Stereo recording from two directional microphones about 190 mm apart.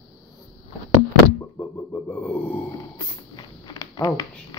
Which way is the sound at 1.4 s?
10° left (ahead or behind).